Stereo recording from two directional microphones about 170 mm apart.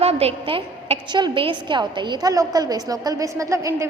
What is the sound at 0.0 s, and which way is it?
A woman's voice, 35° right (ahead or behind).